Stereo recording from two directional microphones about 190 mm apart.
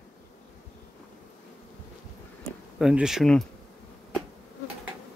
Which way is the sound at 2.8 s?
5° right (ahead or behind).